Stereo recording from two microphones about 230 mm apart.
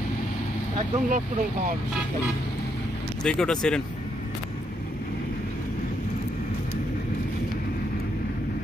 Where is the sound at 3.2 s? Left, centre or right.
Centre.